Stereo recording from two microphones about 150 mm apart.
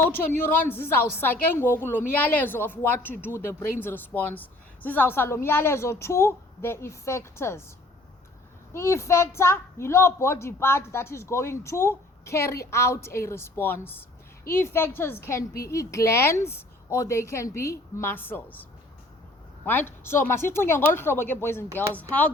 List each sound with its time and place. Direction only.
0.3 s a woman's voice: 15° left (ahead or behind)
8.7 s a woman's voice: 20° left (ahead or behind)
19.6 s a woman's voice: 15° left (ahead or behind)